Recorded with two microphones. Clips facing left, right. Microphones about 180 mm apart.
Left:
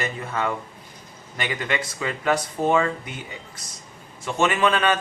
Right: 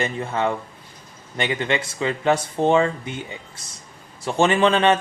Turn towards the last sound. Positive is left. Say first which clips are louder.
# right 4 dB
turn(degrees=-30)  # may be behind; listen again after turning